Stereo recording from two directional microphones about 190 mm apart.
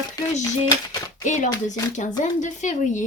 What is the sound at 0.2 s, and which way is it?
Speech, 20° left (ahead or behind).